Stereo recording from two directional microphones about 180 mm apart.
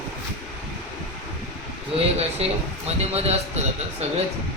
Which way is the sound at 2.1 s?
35° right (ahead or behind).